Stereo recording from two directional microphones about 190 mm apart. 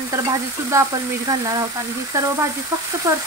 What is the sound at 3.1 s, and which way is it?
Frying, 15° right (ahead or behind).